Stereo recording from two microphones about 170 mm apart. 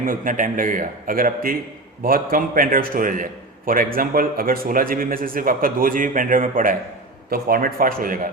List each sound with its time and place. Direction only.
0.0 s a man's voice: 55° right (ahead or behind)